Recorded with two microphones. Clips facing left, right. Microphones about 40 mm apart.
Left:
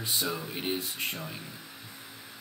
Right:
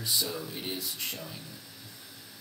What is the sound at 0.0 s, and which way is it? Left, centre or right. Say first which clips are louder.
Speech: left 1 dB; left.